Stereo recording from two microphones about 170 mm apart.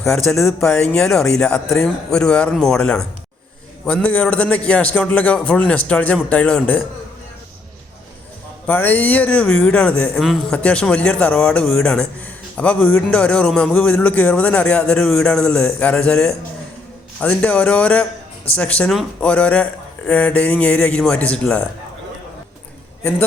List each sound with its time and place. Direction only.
0.3 s speech: 15° left (ahead or behind)
0.6 s a man's voice: 5° left (ahead or behind)
8.6 s speech: 10° left (ahead or behind)